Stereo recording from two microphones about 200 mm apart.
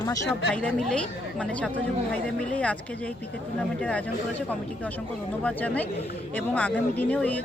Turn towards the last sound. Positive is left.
turn(degrees=5)  # may be behind; listen again after turning